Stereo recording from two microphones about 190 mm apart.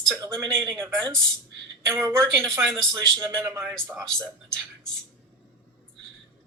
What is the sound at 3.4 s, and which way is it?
Speech, 15° right (ahead or behind).